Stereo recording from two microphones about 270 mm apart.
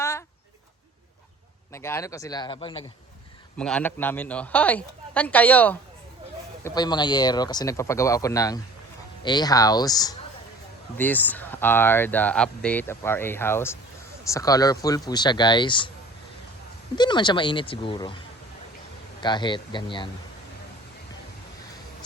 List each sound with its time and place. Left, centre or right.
1.7 s speech: centre
3.6 s speech: centre
16.9 s speech: centre
19.2 s speech: centre